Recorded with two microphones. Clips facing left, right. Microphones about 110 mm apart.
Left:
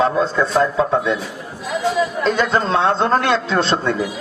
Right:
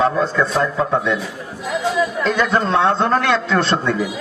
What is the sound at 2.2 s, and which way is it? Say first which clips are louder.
A man's voice: even; 30° left (ahead or behind).